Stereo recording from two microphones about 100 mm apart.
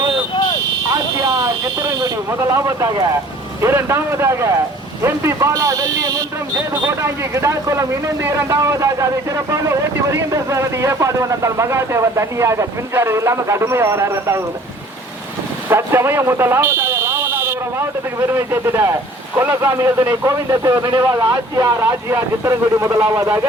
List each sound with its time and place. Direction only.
1.2 s vehicle: 40° right (ahead or behind)
3.6 s speech: 25° right (ahead or behind)
15.7 s speech: 25° right (ahead or behind)